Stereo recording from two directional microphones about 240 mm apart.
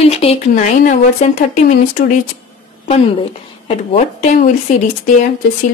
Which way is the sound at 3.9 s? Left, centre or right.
Left.